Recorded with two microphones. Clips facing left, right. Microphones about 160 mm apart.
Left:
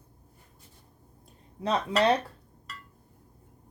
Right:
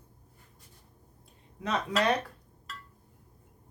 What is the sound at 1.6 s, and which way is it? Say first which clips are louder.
Speech: left 4 dB; 30° left (ahead or behind).